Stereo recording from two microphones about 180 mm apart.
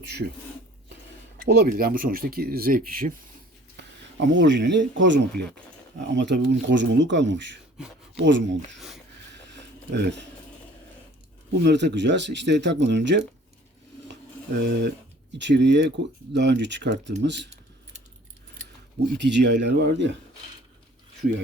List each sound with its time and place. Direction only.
1.5 s speech: 60° right (ahead or behind)
4.4 s speech: 80° right
9.9 s speech: 75° right (ahead or behind)
11.6 s speech: 70° right (ahead or behind)
19.1 s speech: 75° right (ahead or behind)